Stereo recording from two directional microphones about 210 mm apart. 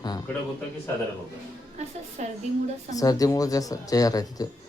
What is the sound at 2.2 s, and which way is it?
Speech, 35° right (ahead or behind).